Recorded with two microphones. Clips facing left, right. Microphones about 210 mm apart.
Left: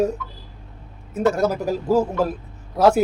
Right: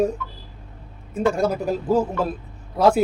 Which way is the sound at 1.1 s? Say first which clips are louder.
Left 1 dB; 5° left (ahead or behind).